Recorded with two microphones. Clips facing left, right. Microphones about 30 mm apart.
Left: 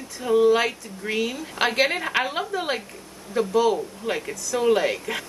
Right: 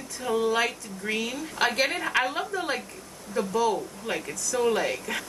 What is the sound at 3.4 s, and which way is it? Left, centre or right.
A woman's voice, centre.